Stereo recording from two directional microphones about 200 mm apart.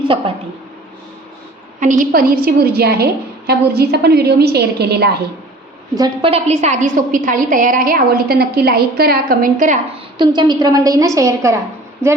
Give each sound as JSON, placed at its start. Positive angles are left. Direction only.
{"t": 1.8, "sound": "a woman's voice", "side_deg": -40}
{"t": 6.0, "sound": "a woman's voice", "side_deg": -30}
{"t": 10.2, "sound": "a woman's voice", "side_deg": -20}